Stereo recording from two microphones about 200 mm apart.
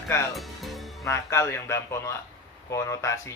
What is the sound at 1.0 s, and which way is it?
Speech, 15° left (ahead or behind).